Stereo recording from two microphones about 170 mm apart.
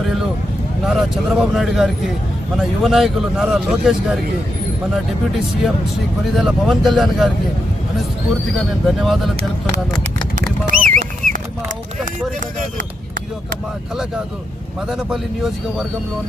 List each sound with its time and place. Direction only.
0.9 s speech: 5° right (ahead or behind)
6.3 s speech: centre (ahead or behind)
8.5 s speech: centre (ahead or behind)
10.7 s a sound: 50° right (ahead or behind)
14.8 s speech: 5° right (ahead or behind)